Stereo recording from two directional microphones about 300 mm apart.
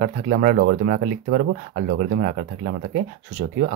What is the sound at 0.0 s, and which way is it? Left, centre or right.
Speech, right.